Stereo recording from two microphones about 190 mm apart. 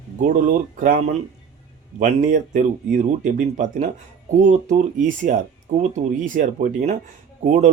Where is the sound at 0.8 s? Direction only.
45° right (ahead or behind).